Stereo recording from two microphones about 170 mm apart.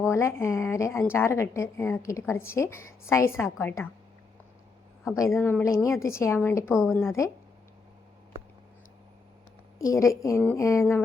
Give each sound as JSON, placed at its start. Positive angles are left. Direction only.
{"t": 0.1, "sound": "a woman's voice", "side_deg": 15}
{"t": 5.4, "sound": "a woman's voice", "side_deg": 15}
{"t": 9.7, "sound": "a woman's voice", "side_deg": 20}